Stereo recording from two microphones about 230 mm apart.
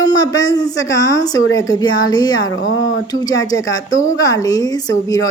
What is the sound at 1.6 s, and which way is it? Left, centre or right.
Speech, centre.